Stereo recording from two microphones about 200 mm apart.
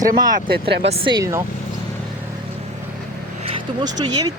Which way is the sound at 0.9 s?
25° right (ahead or behind).